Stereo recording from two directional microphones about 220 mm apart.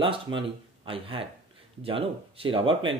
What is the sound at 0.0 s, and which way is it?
Speech, 25° right (ahead or behind).